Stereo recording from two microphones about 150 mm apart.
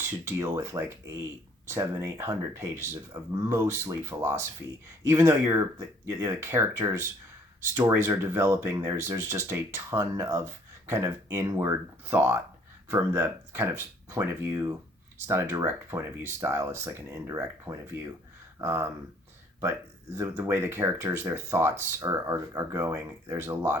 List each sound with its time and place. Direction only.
0.0 s speech: 15° right (ahead or behind)
20.1 s speech: 20° right (ahead or behind)